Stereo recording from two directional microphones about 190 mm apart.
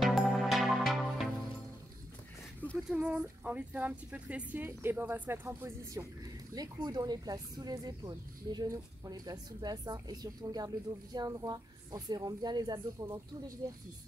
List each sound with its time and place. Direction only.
0.0 s music: centre (ahead or behind)
2.9 s speech: 5° right (ahead or behind)